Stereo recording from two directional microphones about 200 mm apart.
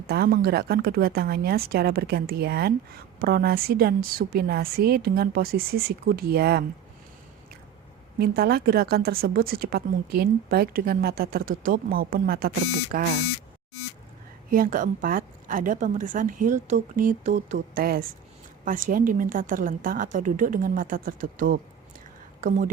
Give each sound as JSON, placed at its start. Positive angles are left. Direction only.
{"t": 0.1, "sound": "a woman's voice", "side_deg": -50}
{"t": 8.2, "sound": "a woman's voice", "side_deg": -50}
{"t": 14.5, "sound": "a woman's voice", "side_deg": -45}